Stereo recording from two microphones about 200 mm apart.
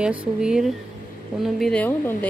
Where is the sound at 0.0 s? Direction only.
5° right (ahead or behind).